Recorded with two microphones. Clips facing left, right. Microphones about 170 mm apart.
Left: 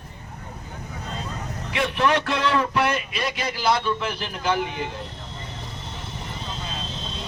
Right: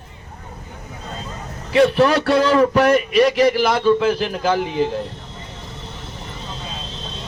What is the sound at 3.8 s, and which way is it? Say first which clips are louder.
A man's voice: right 11 dB; 35° right (ahead or behind).